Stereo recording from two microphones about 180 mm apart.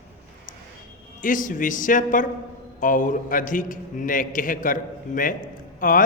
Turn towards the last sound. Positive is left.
turn(degrees=50)  # may be behind; listen again after turning